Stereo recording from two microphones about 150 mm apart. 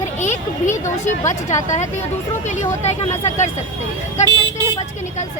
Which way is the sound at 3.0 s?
50° left (ahead or behind).